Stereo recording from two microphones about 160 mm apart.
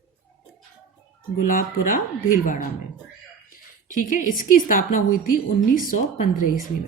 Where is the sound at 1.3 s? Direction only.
55° left (ahead or behind).